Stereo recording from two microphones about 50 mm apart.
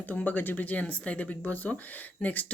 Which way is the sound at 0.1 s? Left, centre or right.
Left.